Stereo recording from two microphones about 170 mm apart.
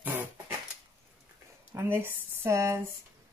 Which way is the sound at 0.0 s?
10° right (ahead or behind).